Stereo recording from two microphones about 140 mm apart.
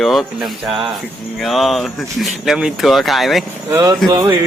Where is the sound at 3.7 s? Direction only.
15° right (ahead or behind).